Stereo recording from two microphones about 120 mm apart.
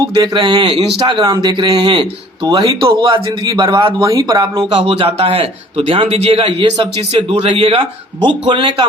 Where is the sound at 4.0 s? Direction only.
30° right (ahead or behind).